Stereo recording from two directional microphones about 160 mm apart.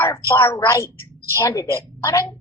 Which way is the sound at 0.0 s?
15° left (ahead or behind).